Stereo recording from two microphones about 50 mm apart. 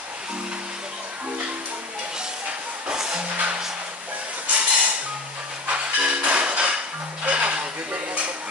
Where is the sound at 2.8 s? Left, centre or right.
Centre.